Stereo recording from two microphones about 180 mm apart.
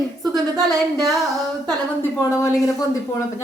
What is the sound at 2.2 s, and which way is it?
Speech, 15° left (ahead or behind).